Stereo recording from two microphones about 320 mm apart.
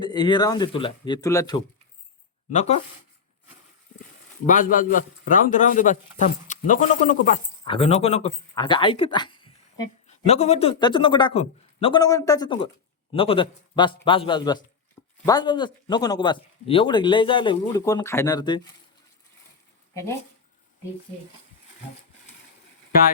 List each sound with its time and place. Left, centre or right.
0.0 s a man's voice: centre
4.4 s a man's voice: left